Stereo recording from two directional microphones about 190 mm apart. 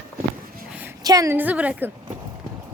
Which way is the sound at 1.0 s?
20° right (ahead or behind).